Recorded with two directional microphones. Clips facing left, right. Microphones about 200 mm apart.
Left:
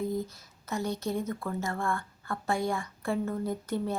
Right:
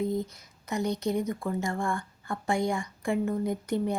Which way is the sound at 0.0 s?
20° right (ahead or behind).